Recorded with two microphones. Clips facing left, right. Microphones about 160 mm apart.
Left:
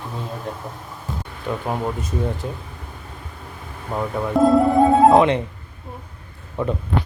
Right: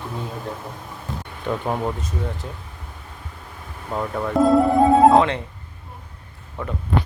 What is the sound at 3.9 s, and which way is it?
Speech, 5° left (ahead or behind).